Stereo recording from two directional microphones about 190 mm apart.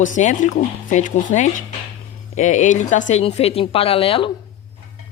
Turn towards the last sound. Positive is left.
turn(degrees=30)  # may be behind; listen again after turning